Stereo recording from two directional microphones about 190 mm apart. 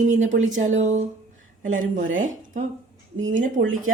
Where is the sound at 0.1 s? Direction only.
40° right (ahead or behind).